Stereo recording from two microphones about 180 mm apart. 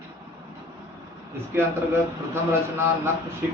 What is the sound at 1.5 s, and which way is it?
Speech, 15° right (ahead or behind).